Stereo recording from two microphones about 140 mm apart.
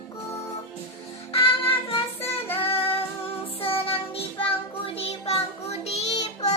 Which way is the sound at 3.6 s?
40° left (ahead or behind).